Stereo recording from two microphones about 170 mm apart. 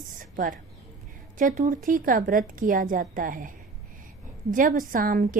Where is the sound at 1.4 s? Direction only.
50° right (ahead or behind).